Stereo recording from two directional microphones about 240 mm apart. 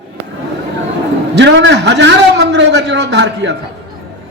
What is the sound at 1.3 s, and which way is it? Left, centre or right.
A man's voice, right.